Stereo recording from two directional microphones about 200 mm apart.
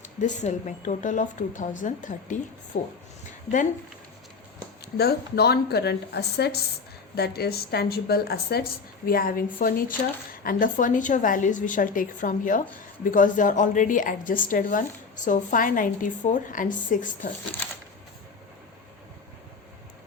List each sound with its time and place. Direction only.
0.2 s a woman's voice: 40° left (ahead or behind)
4.9 s a woman's voice: 55° left (ahead or behind)